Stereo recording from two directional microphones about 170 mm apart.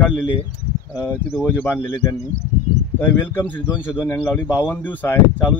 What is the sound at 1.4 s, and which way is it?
Speech, 15° left (ahead or behind).